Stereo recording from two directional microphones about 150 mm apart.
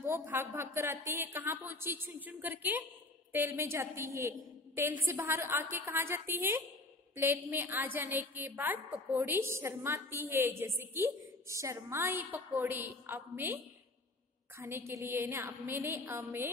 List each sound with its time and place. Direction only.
0.0 s a woman's voice: 15° right (ahead or behind)
14.6 s a woman's voice: 15° right (ahead or behind)